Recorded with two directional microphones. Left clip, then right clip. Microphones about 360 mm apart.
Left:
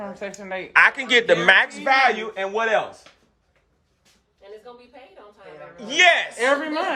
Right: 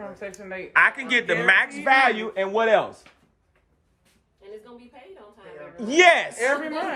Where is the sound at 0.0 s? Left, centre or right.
Left.